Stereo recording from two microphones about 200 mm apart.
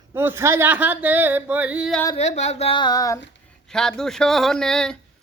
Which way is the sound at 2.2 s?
35° left (ahead or behind).